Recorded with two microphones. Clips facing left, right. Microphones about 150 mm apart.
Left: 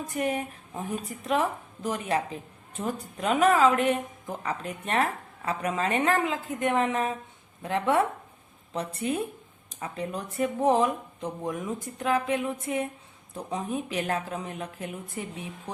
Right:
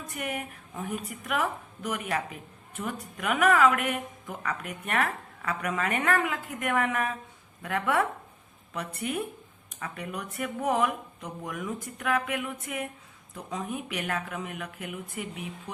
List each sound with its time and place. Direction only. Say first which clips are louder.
0.1 s a woman's voice: left 5 dB; 30° left (ahead or behind)